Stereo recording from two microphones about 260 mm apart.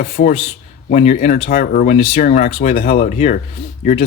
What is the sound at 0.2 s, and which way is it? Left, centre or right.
Speech, left.